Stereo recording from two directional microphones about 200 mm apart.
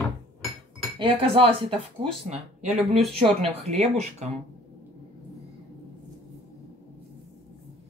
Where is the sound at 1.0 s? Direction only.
25° right (ahead or behind).